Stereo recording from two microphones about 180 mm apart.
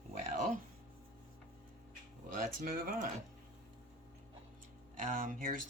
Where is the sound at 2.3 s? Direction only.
50° right (ahead or behind).